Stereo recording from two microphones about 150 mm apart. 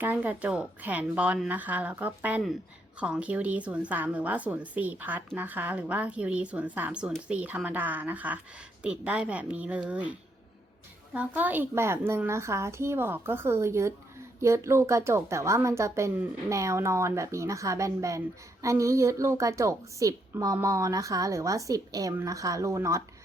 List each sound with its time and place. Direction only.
0.0 s a woman's voice: 10° right (ahead or behind)